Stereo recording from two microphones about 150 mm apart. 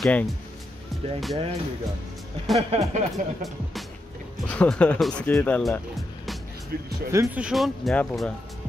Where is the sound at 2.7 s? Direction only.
45° right (ahead or behind).